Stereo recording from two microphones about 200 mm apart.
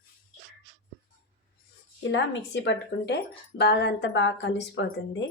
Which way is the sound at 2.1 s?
60° left (ahead or behind).